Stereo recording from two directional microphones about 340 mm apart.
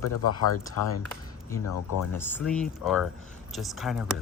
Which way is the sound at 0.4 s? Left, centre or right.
Left.